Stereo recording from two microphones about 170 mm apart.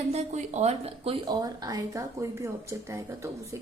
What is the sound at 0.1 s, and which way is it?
A woman's voice, 40° right (ahead or behind).